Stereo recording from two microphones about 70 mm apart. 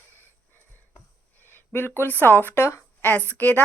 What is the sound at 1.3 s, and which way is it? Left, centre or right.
Speech, left.